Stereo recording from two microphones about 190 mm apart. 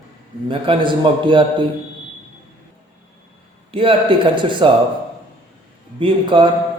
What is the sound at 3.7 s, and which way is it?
A man's voice, 30° right (ahead or behind).